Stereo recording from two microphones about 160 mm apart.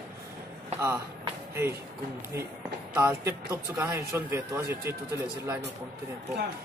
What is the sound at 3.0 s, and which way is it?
Speech, 15° right (ahead or behind).